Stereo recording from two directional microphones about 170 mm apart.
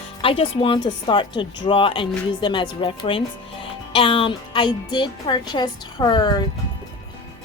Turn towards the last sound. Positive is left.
turn(degrees=25)  # may be behind; listen again after turning